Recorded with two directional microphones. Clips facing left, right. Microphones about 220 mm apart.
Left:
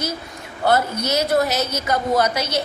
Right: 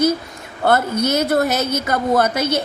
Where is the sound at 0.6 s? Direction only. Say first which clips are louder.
Right 3 dB; 55° right (ahead or behind).